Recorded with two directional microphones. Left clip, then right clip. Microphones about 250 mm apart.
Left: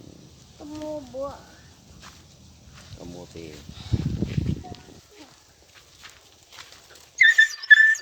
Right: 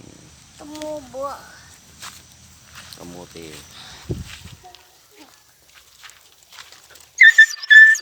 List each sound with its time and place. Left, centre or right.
0.7 s speech: centre
3.0 s speech: right
7.2 s dog: right
7.6 s music: centre